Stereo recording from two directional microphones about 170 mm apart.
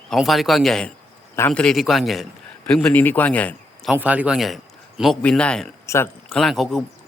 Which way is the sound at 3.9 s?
10° right (ahead or behind).